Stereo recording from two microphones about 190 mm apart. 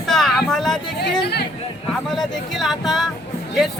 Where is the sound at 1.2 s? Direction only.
60° left (ahead or behind).